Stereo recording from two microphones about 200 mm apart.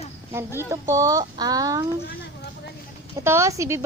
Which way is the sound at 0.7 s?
15° right (ahead or behind).